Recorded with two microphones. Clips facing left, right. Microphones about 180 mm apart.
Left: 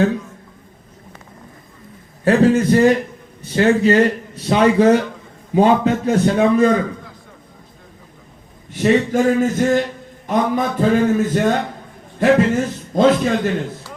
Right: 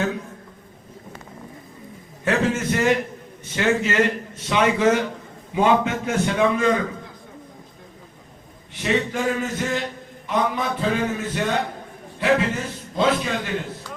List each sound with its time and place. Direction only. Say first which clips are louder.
2.2 s a man's voice: left 8 dB; 35° left (ahead or behind)
8.7 s a man's voice: left 8 dB; 45° left (ahead or behind)